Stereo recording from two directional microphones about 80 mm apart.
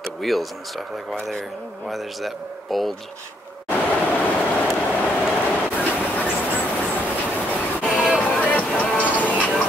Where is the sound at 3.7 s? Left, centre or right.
Centre.